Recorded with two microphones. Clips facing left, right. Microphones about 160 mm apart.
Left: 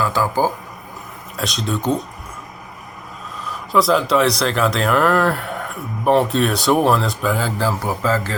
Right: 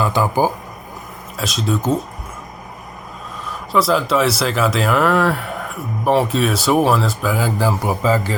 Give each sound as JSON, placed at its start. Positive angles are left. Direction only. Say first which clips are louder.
{"t": 0.0, "sound": "speech", "louder": "right 2 dB", "side_deg": -20}
{"t": 1.4, "sound": "speech", "louder": "right 2 dB", "side_deg": 0}
{"t": 3.7, "sound": "speech", "louder": "left 1 dB", "side_deg": 0}